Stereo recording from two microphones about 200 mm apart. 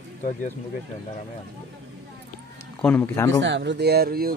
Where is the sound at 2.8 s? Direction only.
10° left (ahead or behind).